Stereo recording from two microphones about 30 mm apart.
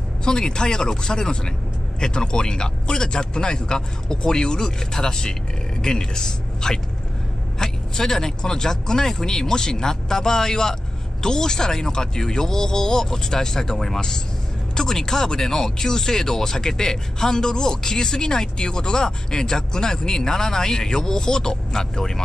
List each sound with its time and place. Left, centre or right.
0.2 s speech: left